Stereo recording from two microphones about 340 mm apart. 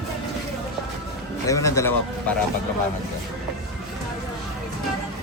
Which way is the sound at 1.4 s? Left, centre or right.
Centre.